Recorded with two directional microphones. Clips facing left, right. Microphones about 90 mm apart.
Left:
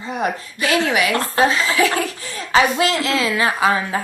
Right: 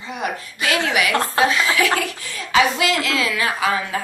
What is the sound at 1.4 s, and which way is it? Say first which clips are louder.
A woman's voice: left 3 dB; 35° left (ahead or behind).